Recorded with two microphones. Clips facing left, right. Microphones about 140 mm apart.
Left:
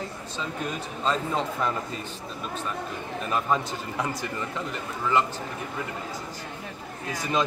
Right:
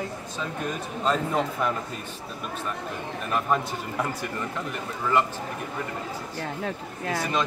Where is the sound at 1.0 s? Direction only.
5° right (ahead or behind).